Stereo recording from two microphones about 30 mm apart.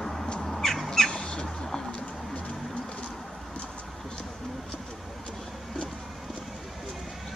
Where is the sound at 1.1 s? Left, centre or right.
Left.